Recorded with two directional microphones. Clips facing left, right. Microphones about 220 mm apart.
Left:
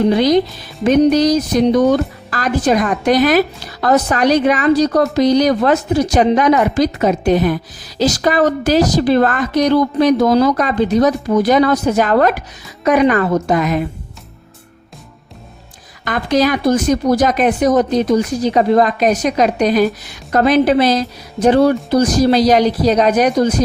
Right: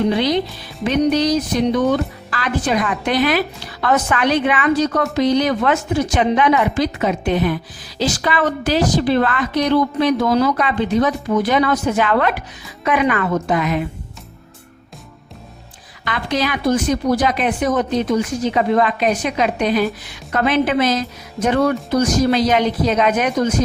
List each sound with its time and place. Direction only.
0.1 s speech: 45° left (ahead or behind)
16.0 s speech: 45° left (ahead or behind)